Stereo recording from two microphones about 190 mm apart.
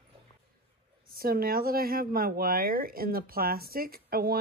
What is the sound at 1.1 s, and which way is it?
Speech, 50° right (ahead or behind).